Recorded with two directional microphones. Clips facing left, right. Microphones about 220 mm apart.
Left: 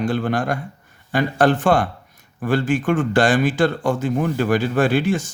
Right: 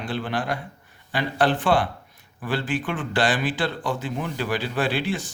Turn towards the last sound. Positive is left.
turn(degrees=45)  # may be behind; listen again after turning